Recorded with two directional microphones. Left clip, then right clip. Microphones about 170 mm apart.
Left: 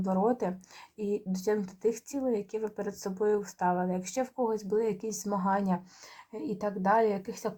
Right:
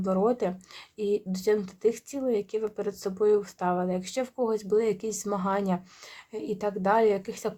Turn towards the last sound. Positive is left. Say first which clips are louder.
# right 4 dB
turn(degrees=-50)  # may be behind; listen again after turning